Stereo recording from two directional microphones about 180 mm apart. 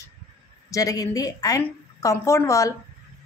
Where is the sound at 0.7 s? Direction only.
20° left (ahead or behind).